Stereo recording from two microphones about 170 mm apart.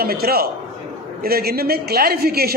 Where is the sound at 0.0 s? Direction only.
65° right (ahead or behind).